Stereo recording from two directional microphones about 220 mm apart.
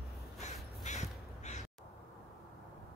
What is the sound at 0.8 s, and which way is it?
Crow, 30° left (ahead or behind).